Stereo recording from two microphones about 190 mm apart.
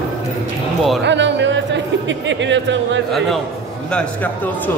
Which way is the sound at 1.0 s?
70° right (ahead or behind).